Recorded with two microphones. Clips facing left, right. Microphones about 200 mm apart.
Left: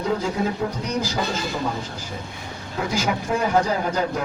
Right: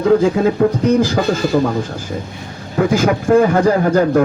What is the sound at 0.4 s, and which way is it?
Speech, 55° right (ahead or behind).